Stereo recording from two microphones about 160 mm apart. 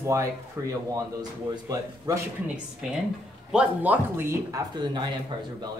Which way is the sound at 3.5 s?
10° right (ahead or behind).